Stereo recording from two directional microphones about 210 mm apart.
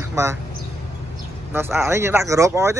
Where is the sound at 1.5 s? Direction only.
10° right (ahead or behind).